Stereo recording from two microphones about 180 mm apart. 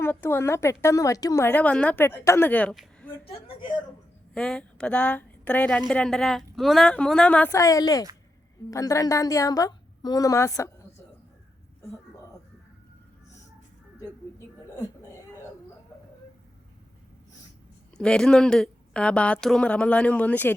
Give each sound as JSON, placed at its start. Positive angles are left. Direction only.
{"t": 0.0, "sound": "a woman's voice", "side_deg": 10}
{"t": 3.4, "sound": "a woman's voice", "side_deg": 25}
{"t": 4.4, "sound": "a woman's voice", "side_deg": 5}
{"t": 14.3, "sound": "a sound", "side_deg": 15}
{"t": 17.9, "sound": "speech", "side_deg": 5}